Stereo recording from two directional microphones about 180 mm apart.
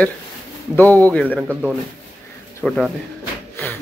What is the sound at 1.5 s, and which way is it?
A man's voice, 5° right (ahead or behind).